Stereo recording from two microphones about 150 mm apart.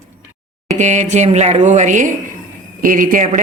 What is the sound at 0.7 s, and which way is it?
Speech, 50° right (ahead or behind).